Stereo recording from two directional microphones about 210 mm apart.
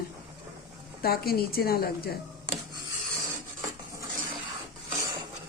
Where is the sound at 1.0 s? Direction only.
45° left (ahead or behind).